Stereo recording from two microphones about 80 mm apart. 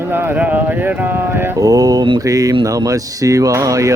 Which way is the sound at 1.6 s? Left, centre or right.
Right.